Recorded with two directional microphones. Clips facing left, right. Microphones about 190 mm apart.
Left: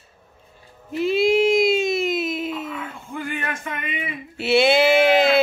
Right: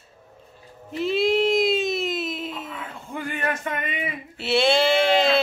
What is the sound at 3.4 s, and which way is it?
Music, 40° right (ahead or behind).